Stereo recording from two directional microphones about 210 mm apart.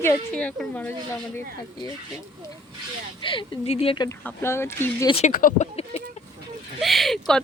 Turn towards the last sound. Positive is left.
turn(degrees=0)  # may be behind; listen again after turning